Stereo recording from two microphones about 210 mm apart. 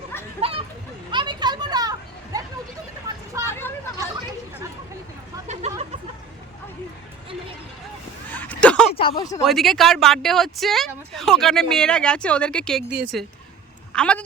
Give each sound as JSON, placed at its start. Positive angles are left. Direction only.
{"t": 0.4, "sound": "music", "side_deg": -30}
{"t": 1.1, "sound": "children playing", "side_deg": -20}
{"t": 3.3, "sound": "vehicle", "side_deg": -15}
{"t": 8.3, "sound": "a sound", "side_deg": 5}
{"t": 8.9, "sound": "speech", "side_deg": 25}
{"t": 9.4, "sound": "speech", "side_deg": 0}